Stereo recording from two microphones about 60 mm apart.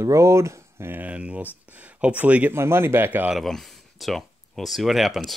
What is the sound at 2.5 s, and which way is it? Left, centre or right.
Speech, right.